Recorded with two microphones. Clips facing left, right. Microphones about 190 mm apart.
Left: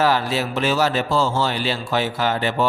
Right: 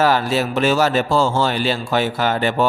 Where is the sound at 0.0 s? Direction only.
50° right (ahead or behind).